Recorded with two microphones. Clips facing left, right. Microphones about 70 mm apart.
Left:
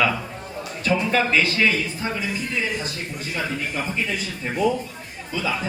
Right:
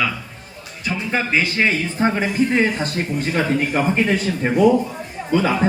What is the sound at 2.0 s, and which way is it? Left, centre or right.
Speech, right.